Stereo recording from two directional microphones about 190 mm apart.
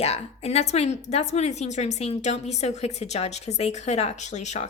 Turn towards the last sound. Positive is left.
turn(degrees=35)  # may be behind; listen again after turning